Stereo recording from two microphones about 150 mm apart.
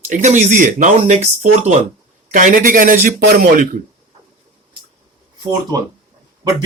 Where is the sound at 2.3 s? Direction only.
60° right (ahead or behind); by 3.7 s 80° right.